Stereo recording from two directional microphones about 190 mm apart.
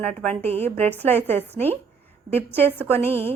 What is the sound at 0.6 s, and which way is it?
A woman's voice, 10° left (ahead or behind).